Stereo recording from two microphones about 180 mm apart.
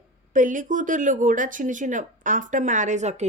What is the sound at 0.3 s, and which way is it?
Speech, 45° right (ahead or behind).